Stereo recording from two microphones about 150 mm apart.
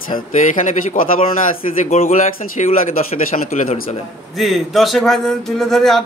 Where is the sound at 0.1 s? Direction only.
60° left (ahead or behind).